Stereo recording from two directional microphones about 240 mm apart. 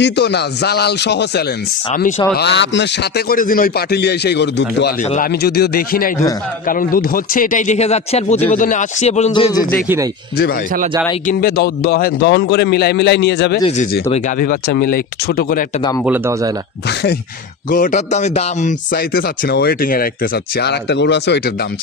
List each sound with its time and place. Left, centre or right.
0.0 s a man's voice: left
1.9 s a man's voice: left
2.3 s a man's voice: left
11.2 s a man's voice: left
16.0 s speech: centre
17.6 s a man's voice: left